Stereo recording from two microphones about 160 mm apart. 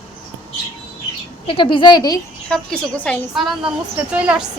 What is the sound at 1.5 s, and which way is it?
Speech, 30° left (ahead or behind).